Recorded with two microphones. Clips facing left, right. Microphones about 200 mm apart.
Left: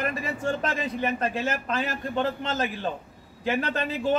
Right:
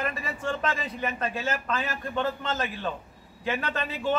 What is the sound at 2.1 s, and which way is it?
A man's voice, 35° left (ahead or behind).